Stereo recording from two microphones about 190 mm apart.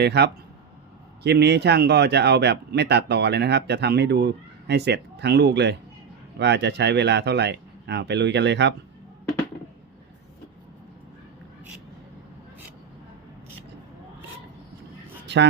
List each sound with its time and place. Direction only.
0.0 s speech: 60° right (ahead or behind)